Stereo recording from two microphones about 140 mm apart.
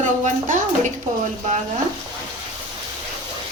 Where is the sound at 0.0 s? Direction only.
60° right (ahead or behind).